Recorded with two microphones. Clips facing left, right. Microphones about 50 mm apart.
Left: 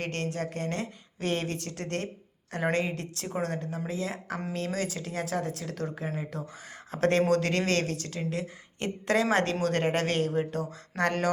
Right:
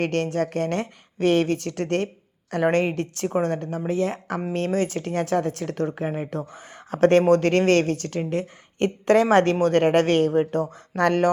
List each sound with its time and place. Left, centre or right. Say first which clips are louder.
0.0 s speech: right 9 dB; right